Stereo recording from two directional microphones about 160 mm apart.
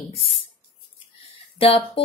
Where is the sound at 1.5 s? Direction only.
35° left (ahead or behind).